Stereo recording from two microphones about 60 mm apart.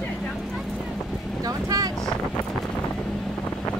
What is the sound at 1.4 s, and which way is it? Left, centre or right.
Boat, right.